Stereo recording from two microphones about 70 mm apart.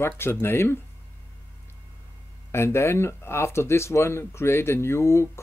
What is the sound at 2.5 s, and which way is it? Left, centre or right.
Speech, left.